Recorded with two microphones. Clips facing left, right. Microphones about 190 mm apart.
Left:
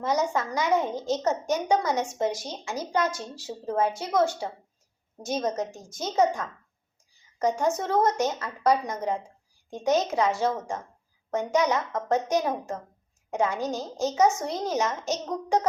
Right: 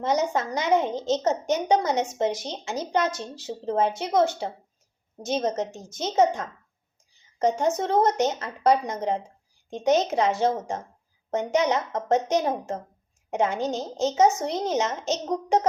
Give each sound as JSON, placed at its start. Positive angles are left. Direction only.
{"t": 0.0, "sound": "a woman's voice", "side_deg": -20}